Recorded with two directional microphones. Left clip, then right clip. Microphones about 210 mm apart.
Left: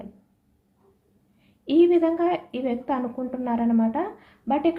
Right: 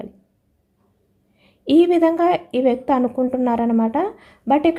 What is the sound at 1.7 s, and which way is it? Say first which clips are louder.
A woman's voice: right 4 dB; 55° right (ahead or behind).